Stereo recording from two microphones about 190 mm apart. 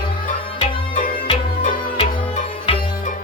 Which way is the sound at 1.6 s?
40° left (ahead or behind).